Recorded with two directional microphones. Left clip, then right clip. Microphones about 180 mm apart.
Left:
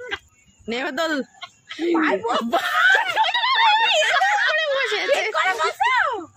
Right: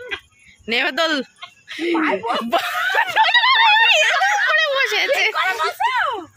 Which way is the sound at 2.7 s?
10° right (ahead or behind).